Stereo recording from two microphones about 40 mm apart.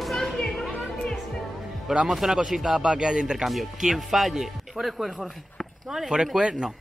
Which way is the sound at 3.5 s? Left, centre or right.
Centre.